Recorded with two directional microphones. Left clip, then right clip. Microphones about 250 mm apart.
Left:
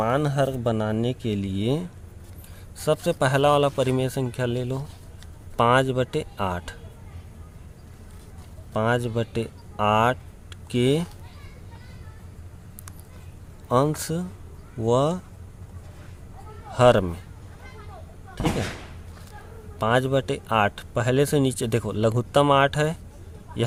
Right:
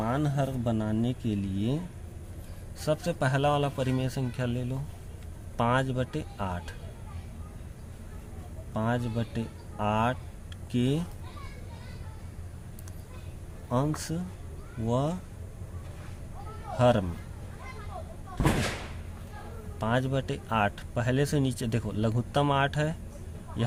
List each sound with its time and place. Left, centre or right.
0.0 s a man's voice: left
2.8 s a man's voice: left
8.7 s a man's voice: left
13.7 s a man's voice: left
16.7 s a man's voice: left
19.8 s speech: left